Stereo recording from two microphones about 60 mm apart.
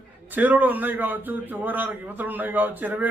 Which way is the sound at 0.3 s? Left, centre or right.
Right.